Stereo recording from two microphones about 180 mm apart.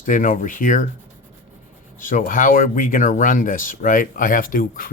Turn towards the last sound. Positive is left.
turn(degrees=50)  # may be behind; listen again after turning